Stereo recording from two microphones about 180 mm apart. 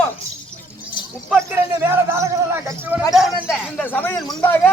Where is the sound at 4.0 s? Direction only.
10° left (ahead or behind).